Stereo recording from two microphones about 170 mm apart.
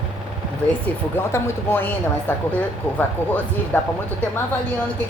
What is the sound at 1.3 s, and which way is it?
A woman's voice, 10° left (ahead or behind).